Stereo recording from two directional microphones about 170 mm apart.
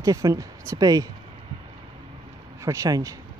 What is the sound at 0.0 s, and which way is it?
Speech, 20° right (ahead or behind).